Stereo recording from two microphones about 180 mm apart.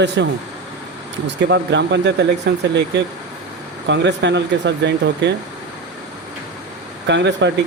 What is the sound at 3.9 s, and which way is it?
Speech, 75° right (ahead or behind).